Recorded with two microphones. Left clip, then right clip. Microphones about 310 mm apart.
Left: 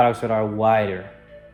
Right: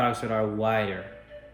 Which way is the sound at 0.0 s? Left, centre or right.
Left.